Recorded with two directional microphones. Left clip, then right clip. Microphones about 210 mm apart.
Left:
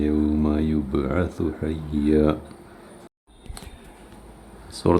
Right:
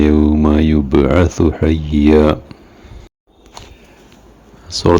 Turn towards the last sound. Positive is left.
turn(degrees=-30)  # may be behind; listen again after turning